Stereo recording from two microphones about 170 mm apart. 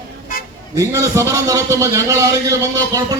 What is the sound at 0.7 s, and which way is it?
A man's voice, 15° right (ahead or behind).